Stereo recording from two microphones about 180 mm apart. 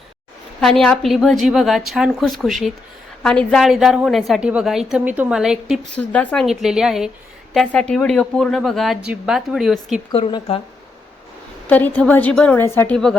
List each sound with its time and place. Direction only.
0.6 s a woman's voice: centre (ahead or behind)
10.1 s a woman's voice: 30° left (ahead or behind)
11.7 s a woman's voice: 10° left (ahead or behind)